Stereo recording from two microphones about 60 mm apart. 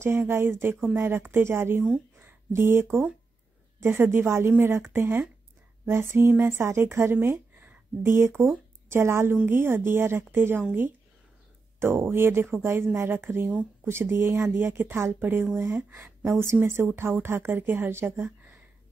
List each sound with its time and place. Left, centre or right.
0.0 s a woman's voice: right
2.1 s a sound: right
3.8 s a woman's voice: right
16.3 s a woman's voice: right